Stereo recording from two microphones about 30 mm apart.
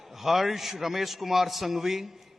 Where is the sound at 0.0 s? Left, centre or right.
Centre.